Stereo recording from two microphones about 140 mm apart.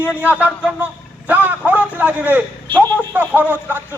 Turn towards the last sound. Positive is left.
turn(degrees=-15)  # may be behind; listen again after turning